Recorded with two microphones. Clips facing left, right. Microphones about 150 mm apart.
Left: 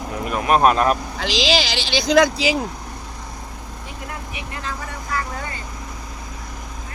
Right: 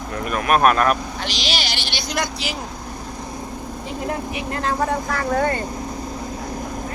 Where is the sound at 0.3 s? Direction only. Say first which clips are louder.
Left 1 dB; 20° left (ahead or behind).